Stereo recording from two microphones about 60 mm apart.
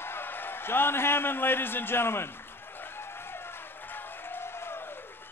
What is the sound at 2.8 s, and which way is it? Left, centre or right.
Applause, left.